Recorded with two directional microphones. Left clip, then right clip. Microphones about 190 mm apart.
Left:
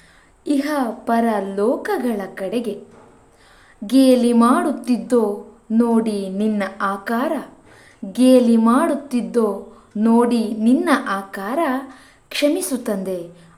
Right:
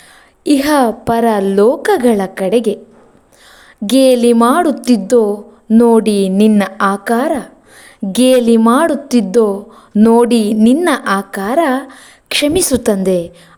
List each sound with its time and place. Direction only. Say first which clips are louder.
0.4 s a woman's voice: right 10 dB; 50° right (ahead or behind)
3.8 s a woman's voice: right 6 dB; 45° right (ahead or behind)
8.1 s a woman's voice: right 4 dB; 50° right (ahead or behind)